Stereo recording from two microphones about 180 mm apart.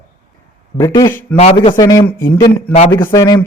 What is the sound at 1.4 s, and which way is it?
A man's voice, 30° left (ahead or behind).